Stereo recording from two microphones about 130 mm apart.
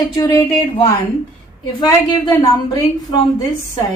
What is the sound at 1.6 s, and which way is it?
Speech, 35° left (ahead or behind).